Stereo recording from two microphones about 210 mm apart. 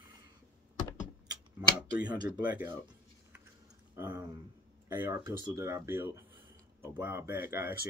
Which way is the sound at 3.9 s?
10° right (ahead or behind).